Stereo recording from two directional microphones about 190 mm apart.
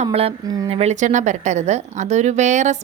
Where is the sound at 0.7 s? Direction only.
35° right (ahead or behind).